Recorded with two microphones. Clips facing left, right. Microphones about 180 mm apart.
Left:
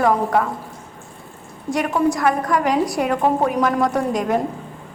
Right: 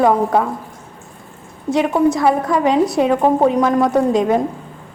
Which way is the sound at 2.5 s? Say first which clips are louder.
Right 4 dB; 25° right (ahead or behind).